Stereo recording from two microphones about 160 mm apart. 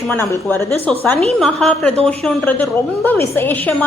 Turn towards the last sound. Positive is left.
turn(degrees=10)  # may be behind; listen again after turning